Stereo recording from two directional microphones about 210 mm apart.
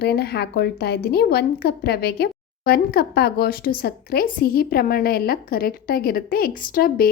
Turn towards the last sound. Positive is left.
turn(degrees=45)  # may be behind; listen again after turning